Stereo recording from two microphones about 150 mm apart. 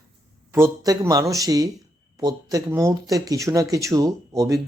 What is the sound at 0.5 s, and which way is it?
Speech, 20° right (ahead or behind).